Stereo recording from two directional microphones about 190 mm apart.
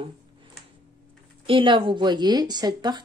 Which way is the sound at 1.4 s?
25° right (ahead or behind).